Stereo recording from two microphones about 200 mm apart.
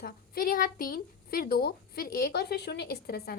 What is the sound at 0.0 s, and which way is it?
A woman's voice, 45° left (ahead or behind).